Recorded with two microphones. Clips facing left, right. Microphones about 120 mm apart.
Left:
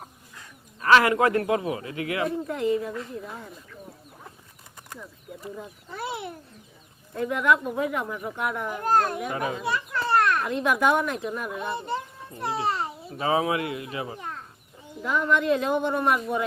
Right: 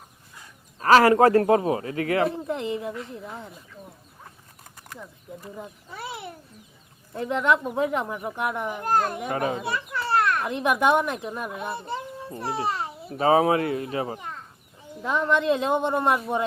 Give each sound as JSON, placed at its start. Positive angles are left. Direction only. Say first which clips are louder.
{"t": 0.8, "sound": "speech", "louder": "right 3 dB", "side_deg": -35}
{"t": 2.3, "sound": "speech", "louder": "left 3 dB", "side_deg": -20}
{"t": 6.0, "sound": "a child's voice", "louder": "left 3 dB", "side_deg": 0}
{"t": 7.2, "sound": "speech", "louder": "even", "side_deg": -25}
{"t": 9.0, "sound": "a child's voice", "louder": "left 1 dB", "side_deg": -5}
{"t": 9.2, "sound": "a child's voice", "louder": "right 2 dB", "side_deg": -45}
{"t": 9.7, "sound": "children playing", "louder": "left 1 dB", "side_deg": -5}
{"t": 10.4, "sound": "speech", "louder": "right 1 dB", "side_deg": -20}
{"t": 11.5, "sound": "a child's voice", "louder": "left 1 dB", "side_deg": -10}
{"t": 13.1, "sound": "speech", "louder": "right 5 dB", "side_deg": -40}
{"t": 15.0, "sound": "speech", "louder": "right 1 dB", "side_deg": -25}